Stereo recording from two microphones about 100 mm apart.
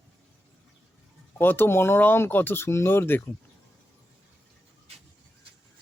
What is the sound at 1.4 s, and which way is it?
Speech, 20° left (ahead or behind).